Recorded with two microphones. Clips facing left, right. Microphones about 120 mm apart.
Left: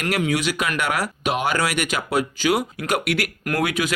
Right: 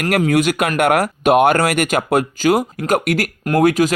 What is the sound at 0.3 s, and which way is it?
Speech, 50° right (ahead or behind).